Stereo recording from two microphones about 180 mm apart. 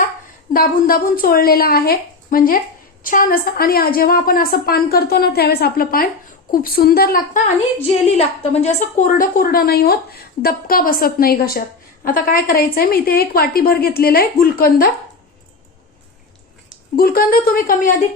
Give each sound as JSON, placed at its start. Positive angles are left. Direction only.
{"t": 0.5, "sound": "a woman's voice", "side_deg": 55}
{"t": 8.1, "sound": "a woman's voice", "side_deg": 40}
{"t": 17.0, "sound": "a woman's voice", "side_deg": 55}